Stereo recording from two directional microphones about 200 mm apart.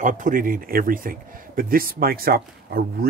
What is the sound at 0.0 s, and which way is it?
Speech, 40° right (ahead or behind).